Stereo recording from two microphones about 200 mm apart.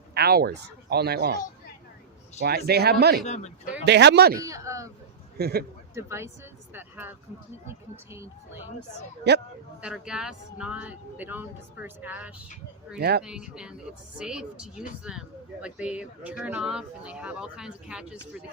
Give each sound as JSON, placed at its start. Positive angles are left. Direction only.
{"t": 0.1, "sound": "speech", "side_deg": -50}
{"t": 2.4, "sound": "speech", "side_deg": -50}
{"t": 3.2, "sound": "speech", "side_deg": 35}
{"t": 3.8, "sound": "speech", "side_deg": -60}
{"t": 4.4, "sound": "a sound", "side_deg": -15}
{"t": 5.4, "sound": "speech", "side_deg": -50}
{"t": 5.9, "sound": "speech", "side_deg": -15}
{"t": 9.3, "sound": "speech", "side_deg": -55}
{"t": 9.8, "sound": "speech", "side_deg": -5}
{"t": 13.0, "sound": "speech", "side_deg": -55}
{"t": 13.2, "sound": "speech", "side_deg": -5}